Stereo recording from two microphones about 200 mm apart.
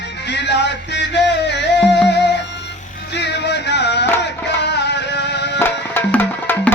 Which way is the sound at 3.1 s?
60° left (ahead or behind).